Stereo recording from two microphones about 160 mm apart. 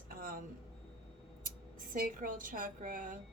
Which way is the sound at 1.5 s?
60° right (ahead or behind).